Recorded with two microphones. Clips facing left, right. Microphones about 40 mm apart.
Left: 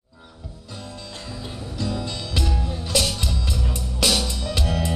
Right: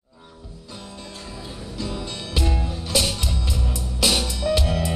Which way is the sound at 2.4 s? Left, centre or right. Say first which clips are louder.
Right 1 dB; right.